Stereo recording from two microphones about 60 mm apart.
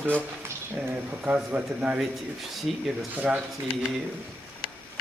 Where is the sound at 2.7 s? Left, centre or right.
Centre.